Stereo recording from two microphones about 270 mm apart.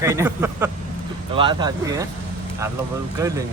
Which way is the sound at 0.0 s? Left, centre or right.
Centre.